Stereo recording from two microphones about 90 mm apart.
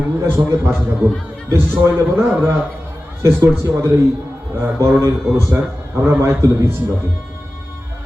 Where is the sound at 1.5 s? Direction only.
30° right (ahead or behind).